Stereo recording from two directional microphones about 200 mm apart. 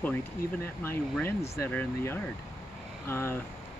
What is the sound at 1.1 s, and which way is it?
Speech, 10° left (ahead or behind).